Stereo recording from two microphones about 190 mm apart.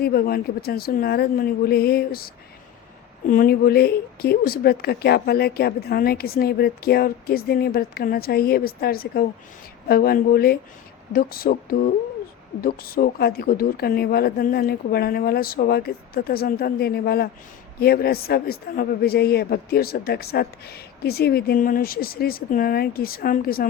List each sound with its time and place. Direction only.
0.0 s speech: 55° left (ahead or behind)